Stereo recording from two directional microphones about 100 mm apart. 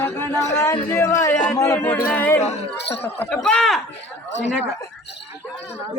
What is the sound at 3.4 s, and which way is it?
Speech, 5° left (ahead or behind).